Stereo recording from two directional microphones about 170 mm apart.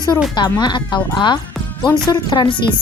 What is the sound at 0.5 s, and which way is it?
A woman's voice, 25° left (ahead or behind).